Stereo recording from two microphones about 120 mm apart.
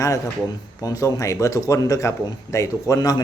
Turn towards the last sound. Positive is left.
turn(degrees=30)  # may be behind; listen again after turning